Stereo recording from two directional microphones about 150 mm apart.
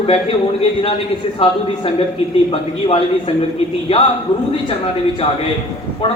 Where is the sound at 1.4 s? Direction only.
40° left (ahead or behind).